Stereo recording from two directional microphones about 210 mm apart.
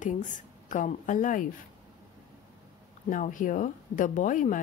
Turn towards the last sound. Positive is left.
turn(degrees=40)  # may be behind; listen again after turning